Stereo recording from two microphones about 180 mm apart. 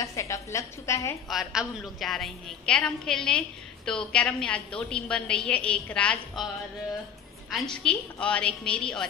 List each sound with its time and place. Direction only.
0.0 s a sound: 15° left (ahead or behind)
1.3 s a woman's voice: centre (ahead or behind)
7.5 s a woman's voice: 5° left (ahead or behind)